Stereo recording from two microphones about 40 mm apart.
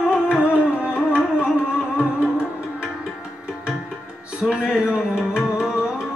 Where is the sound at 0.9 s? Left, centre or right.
Right.